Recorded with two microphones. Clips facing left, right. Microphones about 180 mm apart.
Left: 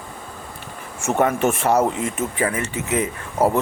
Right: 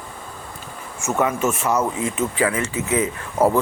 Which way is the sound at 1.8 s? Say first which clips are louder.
Left 1 dB; 35° left (ahead or behind).